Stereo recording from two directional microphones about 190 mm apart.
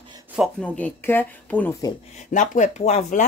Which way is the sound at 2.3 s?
40° left (ahead or behind).